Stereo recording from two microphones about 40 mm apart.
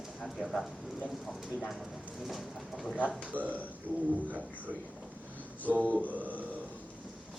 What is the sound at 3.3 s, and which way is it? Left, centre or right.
Speech, right.